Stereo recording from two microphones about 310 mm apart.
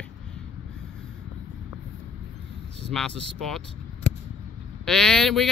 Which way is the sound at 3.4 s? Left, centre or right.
Centre.